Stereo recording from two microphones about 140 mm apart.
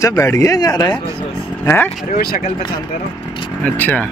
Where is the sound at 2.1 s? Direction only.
90° left.